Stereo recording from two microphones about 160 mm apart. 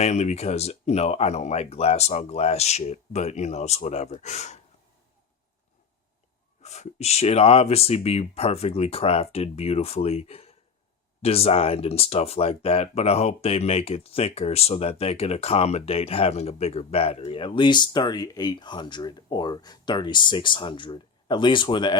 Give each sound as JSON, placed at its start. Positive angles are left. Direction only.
{"t": 0.0, "sound": "speech", "side_deg": 45}
{"t": 6.6, "sound": "speech", "side_deg": 45}